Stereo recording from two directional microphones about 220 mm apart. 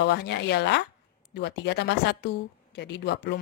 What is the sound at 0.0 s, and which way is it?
A woman's voice, 50° left (ahead or behind).